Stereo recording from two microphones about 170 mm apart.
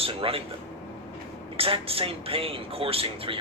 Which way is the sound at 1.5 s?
35° right (ahead or behind).